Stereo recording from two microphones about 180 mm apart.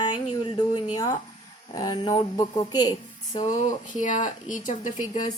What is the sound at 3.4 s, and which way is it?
Speech, 40° left (ahead or behind).